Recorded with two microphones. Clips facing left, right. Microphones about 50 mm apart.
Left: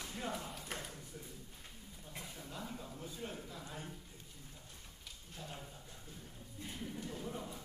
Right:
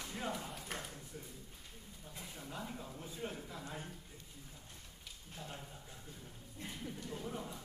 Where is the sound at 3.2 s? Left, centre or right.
Centre.